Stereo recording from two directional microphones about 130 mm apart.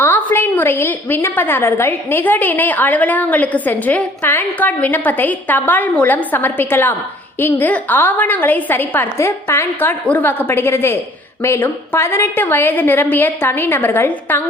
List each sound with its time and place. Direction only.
0.0 s a woman's voice: 15° left (ahead or behind)